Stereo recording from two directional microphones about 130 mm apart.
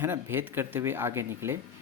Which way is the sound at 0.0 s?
15° right (ahead or behind).